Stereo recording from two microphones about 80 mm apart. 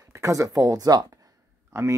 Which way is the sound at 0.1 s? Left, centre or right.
Right.